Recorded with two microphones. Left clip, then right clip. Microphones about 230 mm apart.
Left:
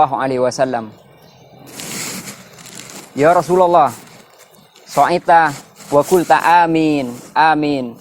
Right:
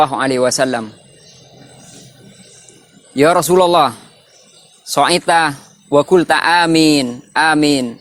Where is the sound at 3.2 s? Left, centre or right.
Right.